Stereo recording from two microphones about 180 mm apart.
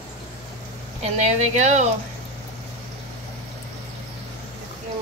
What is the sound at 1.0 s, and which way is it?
Speech, 40° right (ahead or behind).